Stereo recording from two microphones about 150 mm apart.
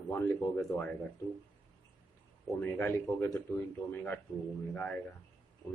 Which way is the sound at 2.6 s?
15° left (ahead or behind).